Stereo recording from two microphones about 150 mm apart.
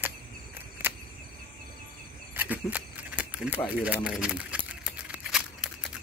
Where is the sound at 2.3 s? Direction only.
10° right (ahead or behind).